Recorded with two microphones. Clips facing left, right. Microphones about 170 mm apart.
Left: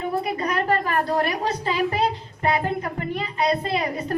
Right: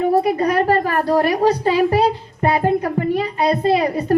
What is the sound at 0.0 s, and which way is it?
A woman's voice, 40° right (ahead or behind).